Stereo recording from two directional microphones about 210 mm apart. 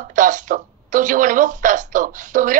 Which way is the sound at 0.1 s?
35° right (ahead or behind).